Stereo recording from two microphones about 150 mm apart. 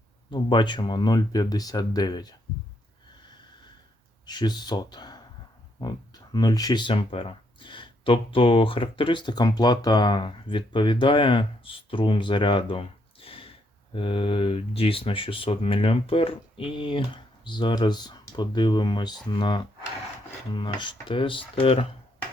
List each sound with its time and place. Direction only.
0.3 s speech: 30° left (ahead or behind)
4.3 s speech: 30° left (ahead or behind)